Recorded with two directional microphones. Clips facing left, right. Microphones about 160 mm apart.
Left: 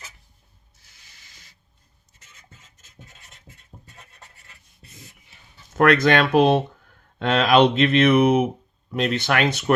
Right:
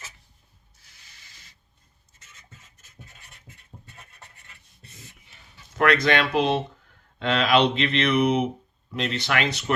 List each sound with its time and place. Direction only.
5.7 s speech: 50° left (ahead or behind)